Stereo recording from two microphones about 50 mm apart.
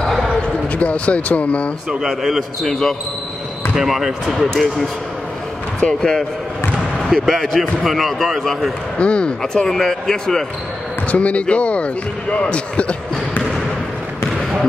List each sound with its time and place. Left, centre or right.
0.7 s speech: left
1.9 s speech: centre
2.7 s a man's voice: centre
3.7 s speech: centre
5.8 s a man's voice: centre
7.1 s speech: centre
8.9 s a man's voice: left
11.1 s speech: left